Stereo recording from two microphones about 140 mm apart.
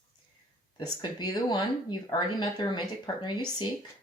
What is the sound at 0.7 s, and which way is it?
Speech, 30° left (ahead or behind).